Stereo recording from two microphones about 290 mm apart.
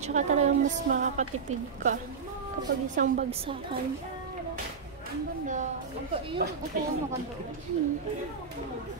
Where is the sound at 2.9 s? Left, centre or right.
Right.